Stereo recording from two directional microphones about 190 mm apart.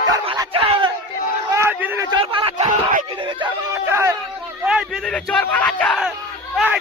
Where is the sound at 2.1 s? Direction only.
25° right (ahead or behind).